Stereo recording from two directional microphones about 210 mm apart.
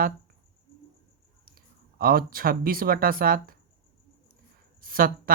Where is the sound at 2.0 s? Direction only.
45° right (ahead or behind).